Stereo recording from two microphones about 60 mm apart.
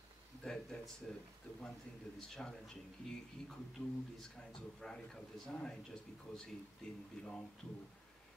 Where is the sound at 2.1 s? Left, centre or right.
Centre.